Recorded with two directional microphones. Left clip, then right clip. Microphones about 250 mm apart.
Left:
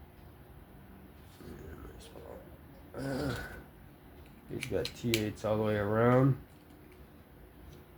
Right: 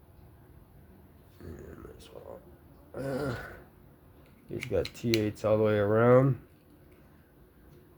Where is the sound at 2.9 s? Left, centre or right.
Right.